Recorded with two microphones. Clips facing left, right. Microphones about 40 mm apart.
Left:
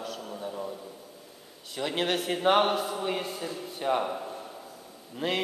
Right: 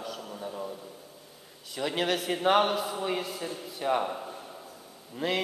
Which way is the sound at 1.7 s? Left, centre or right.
Centre.